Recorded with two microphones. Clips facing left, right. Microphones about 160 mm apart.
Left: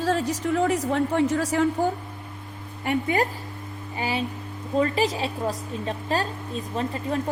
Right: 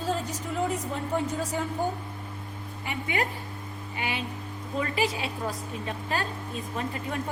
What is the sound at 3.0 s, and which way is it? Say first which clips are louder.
Speech: left 6 dB; 35° left (ahead or behind).